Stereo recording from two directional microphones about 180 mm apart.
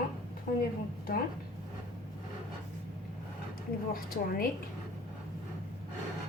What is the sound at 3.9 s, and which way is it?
Speech, 55° left (ahead or behind).